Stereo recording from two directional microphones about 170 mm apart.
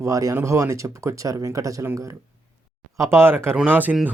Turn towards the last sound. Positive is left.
turn(degrees=-10)  # may be behind; listen again after turning